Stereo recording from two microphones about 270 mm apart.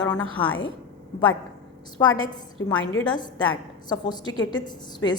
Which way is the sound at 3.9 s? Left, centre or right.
Centre.